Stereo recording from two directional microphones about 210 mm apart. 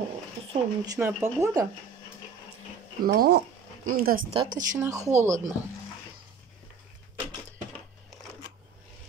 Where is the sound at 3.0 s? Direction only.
45° right (ahead or behind).